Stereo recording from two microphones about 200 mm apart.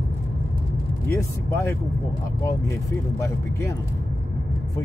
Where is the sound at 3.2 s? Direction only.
15° left (ahead or behind).